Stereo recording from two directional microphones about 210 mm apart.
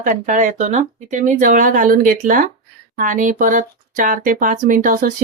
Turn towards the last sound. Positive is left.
turn(degrees=-40)  # may be behind; listen again after turning